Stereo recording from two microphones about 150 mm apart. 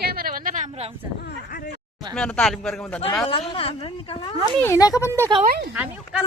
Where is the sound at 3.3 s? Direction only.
40° left (ahead or behind).